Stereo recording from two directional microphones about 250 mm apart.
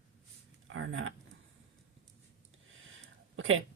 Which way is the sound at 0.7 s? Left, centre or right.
Right.